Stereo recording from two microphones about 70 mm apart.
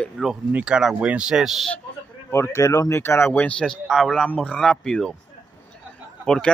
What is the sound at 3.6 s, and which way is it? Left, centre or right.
Speech, centre.